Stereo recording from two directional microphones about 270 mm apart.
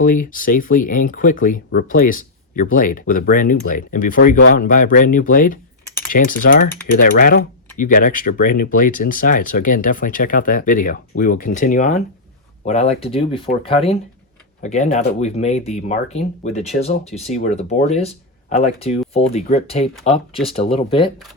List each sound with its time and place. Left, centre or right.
0.0 s speech: left